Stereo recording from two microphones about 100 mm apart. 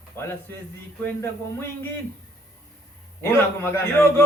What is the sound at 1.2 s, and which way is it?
Speech, 25° left (ahead or behind).